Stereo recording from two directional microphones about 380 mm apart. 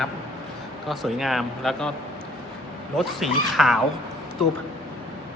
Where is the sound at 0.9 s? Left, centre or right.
Centre.